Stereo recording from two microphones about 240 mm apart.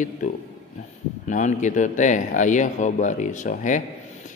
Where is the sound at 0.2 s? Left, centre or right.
Left.